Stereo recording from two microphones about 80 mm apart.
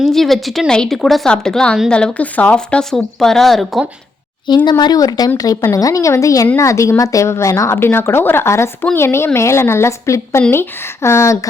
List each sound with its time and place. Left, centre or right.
0.0 s a woman's voice: centre
4.4 s a woman's voice: left